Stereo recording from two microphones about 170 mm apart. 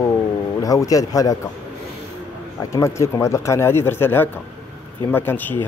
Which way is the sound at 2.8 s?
15° left (ahead or behind).